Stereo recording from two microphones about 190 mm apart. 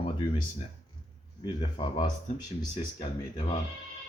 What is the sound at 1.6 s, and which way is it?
Speech, 20° left (ahead or behind).